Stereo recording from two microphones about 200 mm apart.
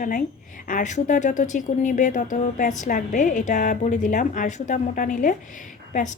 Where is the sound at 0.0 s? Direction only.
40° left (ahead or behind).